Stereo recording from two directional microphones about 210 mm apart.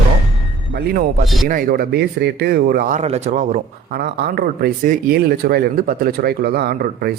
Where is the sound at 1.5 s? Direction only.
40° right (ahead or behind).